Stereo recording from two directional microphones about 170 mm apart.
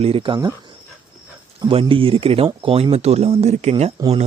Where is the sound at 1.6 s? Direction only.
30° right (ahead or behind).